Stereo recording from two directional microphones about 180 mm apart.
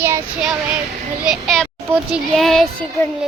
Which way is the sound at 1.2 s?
Centre (ahead or behind).